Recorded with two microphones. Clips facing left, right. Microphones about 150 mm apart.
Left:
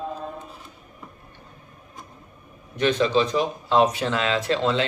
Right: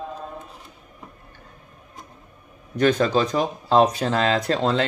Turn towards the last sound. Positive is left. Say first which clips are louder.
# right 1 dB
turn(degrees=-40)  # may be behind; listen again after turning